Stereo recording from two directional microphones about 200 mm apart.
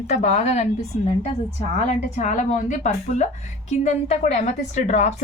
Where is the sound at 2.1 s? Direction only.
40° left (ahead or behind).